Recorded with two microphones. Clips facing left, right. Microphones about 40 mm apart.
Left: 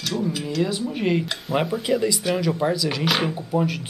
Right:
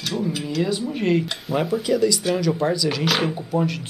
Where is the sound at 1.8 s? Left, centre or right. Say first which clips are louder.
Right 2 dB; centre.